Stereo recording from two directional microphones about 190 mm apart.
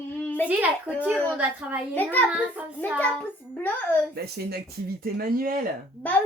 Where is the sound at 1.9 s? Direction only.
10° left (ahead or behind).